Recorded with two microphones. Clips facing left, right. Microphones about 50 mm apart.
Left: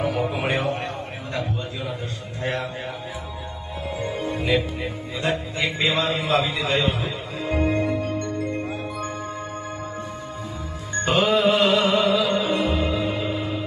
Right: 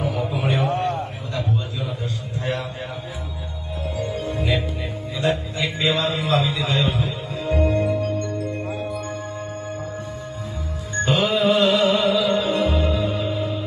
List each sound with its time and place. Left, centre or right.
0.3 s music: left
1.3 s a sound: left
2.4 s music: left
4.0 s music: left
4.4 s music: centre
5.2 s a sound: left
7.0 s music: left
11.0 s music: left